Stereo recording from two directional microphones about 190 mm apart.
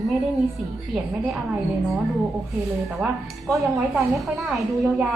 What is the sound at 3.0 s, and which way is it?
A woman's voice, centre (ahead or behind).